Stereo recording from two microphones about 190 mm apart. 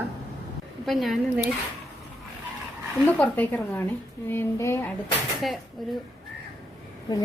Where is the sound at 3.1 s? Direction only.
5° left (ahead or behind).